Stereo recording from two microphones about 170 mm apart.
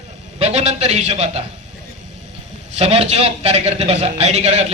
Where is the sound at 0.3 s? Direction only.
40° right (ahead or behind).